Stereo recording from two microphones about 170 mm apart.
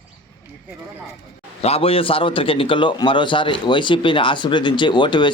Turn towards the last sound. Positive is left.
turn(degrees=25)  # may be behind; listen again after turning